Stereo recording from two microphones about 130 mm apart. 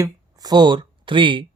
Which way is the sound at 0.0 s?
30° right (ahead or behind).